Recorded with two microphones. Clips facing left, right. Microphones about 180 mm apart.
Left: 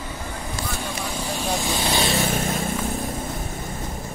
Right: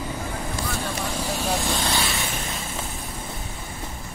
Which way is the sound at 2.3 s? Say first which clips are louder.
Left 8 dB; 50° left (ahead or behind).